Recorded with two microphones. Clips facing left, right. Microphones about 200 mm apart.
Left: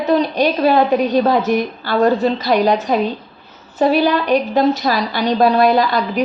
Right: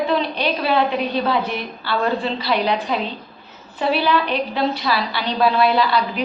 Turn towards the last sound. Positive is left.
turn(degrees=45)  # may be behind; listen again after turning